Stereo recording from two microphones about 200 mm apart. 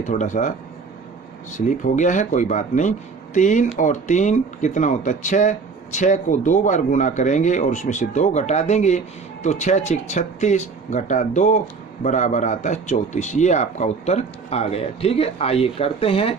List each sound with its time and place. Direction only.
0.0 s speech: 40° left (ahead or behind)
1.5 s speech: 40° left (ahead or behind)